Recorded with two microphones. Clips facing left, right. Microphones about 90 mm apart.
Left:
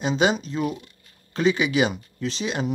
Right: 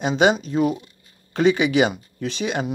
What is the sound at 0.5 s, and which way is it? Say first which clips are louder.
Speech: right 6 dB; 40° right (ahead or behind).